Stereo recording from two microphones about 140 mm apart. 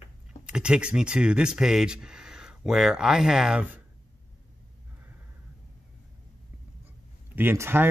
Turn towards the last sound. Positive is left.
turn(degrees=-15)  # may be behind; listen again after turning